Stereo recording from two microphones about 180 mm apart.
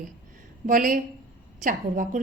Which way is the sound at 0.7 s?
50° right (ahead or behind).